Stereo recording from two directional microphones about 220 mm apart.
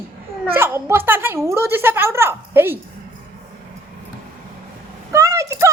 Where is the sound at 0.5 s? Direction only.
10° right (ahead or behind).